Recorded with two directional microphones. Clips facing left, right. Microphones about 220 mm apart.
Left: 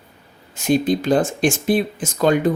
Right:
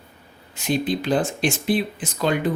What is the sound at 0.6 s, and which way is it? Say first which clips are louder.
Speech: left 5 dB; 45° left (ahead or behind).